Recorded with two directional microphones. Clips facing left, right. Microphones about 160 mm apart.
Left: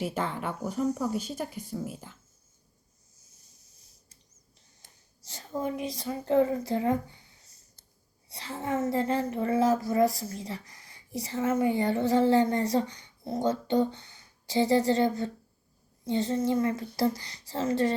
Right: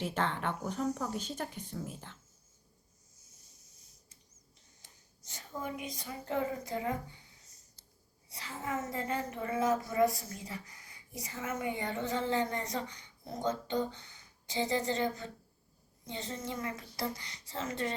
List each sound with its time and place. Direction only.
0.0 s speech: 10° left (ahead or behind)
4.8 s a woman's voice: 35° left (ahead or behind)